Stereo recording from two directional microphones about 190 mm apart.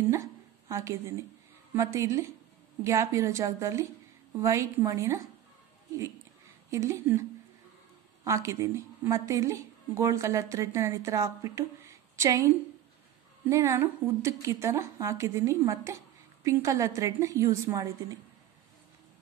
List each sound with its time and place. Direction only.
0.1 s a sound: 15° right (ahead or behind)
1.8 s a woman's voice: 15° right (ahead or behind)
6.7 s a woman's voice: 15° right (ahead or behind)
13.5 s a woman's voice: 15° right (ahead or behind)